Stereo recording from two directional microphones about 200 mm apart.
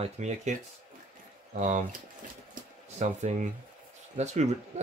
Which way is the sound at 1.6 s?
40° right (ahead or behind).